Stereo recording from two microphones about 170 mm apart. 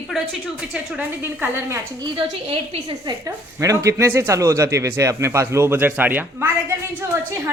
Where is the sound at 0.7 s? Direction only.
10° right (ahead or behind).